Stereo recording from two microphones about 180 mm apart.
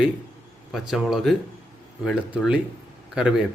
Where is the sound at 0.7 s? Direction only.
Centre (ahead or behind).